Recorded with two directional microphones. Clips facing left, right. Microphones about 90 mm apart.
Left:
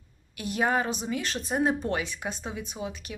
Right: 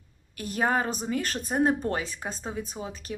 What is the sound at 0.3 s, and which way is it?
A woman's voice, 40° right (ahead or behind).